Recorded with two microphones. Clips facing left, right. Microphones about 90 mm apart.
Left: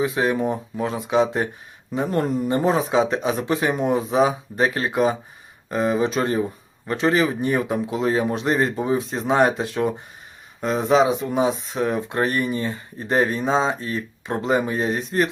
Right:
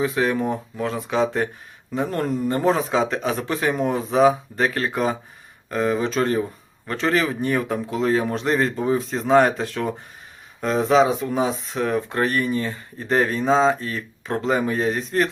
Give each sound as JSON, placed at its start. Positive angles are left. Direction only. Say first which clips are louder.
{"t": 0.0, "sound": "speech", "louder": "even", "side_deg": 15}